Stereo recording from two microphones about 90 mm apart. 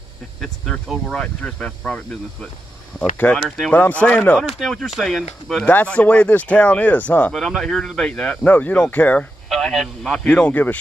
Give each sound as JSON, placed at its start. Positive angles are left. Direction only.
{"t": 0.4, "sound": "speech", "side_deg": 5}
{"t": 3.4, "sound": "speech", "side_deg": 0}
{"t": 3.7, "sound": "speech", "side_deg": 15}
{"t": 4.4, "sound": "speech", "side_deg": 0}
{"t": 5.7, "sound": "speech", "side_deg": 15}
{"t": 7.3, "sound": "speech", "side_deg": 0}
{"t": 9.5, "sound": "speech", "side_deg": 5}